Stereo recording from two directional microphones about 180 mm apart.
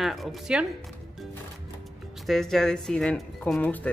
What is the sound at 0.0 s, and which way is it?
Speech, centre (ahead or behind).